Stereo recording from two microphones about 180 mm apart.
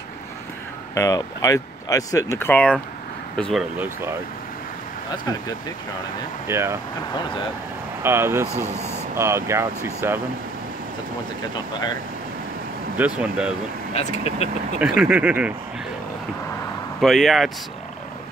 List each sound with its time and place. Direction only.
0.9 s speech: 20° left (ahead or behind)
6.4 s speech: 15° right (ahead or behind)
8.0 s speech: 15° right (ahead or behind)
12.9 s speech: 5° right (ahead or behind)
13.9 s speech: 35° left (ahead or behind)
14.8 s speech: 5° right (ahead or behind)
17.0 s speech: centre (ahead or behind)